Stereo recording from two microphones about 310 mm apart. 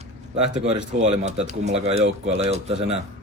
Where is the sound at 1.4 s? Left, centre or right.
Right.